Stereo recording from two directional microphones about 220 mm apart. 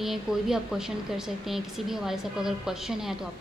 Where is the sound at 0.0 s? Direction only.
Centre (ahead or behind).